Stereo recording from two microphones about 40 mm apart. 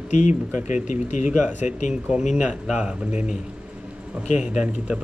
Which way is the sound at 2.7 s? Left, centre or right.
Right.